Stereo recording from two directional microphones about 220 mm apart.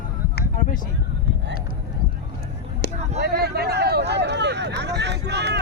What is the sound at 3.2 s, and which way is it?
Speech, 45° right (ahead or behind).